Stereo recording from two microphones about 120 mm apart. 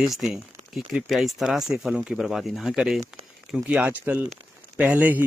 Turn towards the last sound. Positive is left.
turn(degrees=-15)  # may be behind; listen again after turning